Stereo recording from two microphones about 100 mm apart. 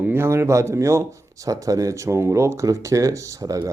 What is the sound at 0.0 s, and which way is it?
Speech, 25° right (ahead or behind).